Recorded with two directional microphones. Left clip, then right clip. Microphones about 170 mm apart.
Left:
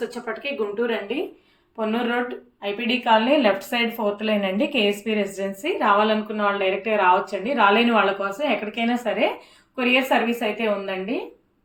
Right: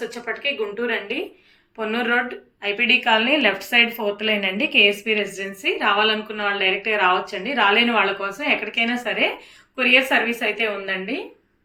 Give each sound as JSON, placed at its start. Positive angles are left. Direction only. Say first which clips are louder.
{"t": 0.1, "sound": "a woman's voice", "louder": "right 3 dB", "side_deg": 35}